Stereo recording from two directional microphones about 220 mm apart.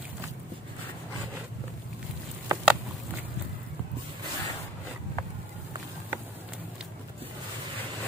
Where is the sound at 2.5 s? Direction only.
15° right (ahead or behind).